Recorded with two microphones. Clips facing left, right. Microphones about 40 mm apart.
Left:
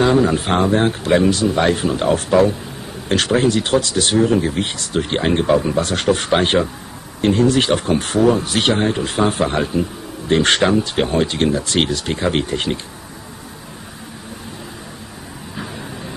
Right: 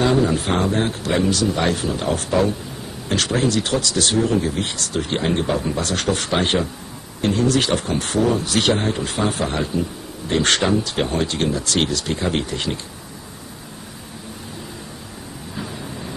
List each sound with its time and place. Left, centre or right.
0.0 s speech: left
3.3 s speech: left